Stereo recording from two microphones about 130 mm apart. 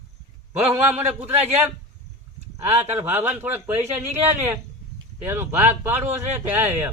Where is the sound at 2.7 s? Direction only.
20° right (ahead or behind).